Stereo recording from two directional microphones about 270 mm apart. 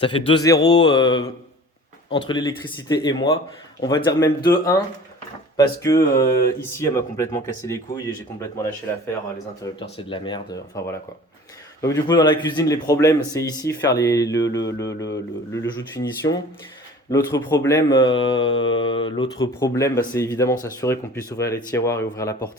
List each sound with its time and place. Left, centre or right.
0.0 s a man's voice: centre
9.6 s a man's voice: centre
14.6 s mantra: left
15.5 s a man's voice: centre